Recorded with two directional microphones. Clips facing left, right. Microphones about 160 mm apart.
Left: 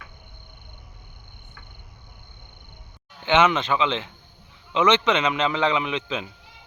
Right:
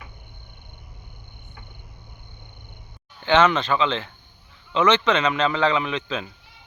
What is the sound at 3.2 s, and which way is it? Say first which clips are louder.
Speech: right 1 dB; 20° left (ahead or behind).